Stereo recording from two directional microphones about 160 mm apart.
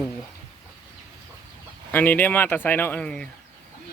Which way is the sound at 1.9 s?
10° left (ahead or behind).